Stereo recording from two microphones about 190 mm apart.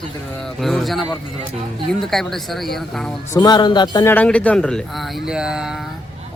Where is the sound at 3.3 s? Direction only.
20° left (ahead or behind).